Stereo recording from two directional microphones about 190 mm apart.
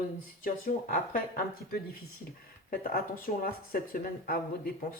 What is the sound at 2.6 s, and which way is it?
Speech, 50° left (ahead or behind).